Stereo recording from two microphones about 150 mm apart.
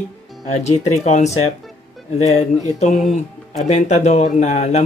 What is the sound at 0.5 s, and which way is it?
Speech, 50° left (ahead or behind).